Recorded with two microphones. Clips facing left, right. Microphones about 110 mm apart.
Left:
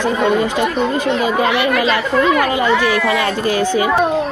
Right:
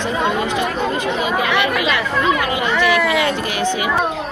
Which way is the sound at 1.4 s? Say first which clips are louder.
Left 3 dB; 30° left (ahead or behind).